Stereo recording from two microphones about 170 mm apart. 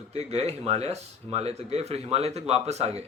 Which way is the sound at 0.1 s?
40° right (ahead or behind).